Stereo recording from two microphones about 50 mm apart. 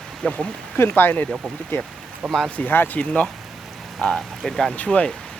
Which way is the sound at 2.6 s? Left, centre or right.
Left.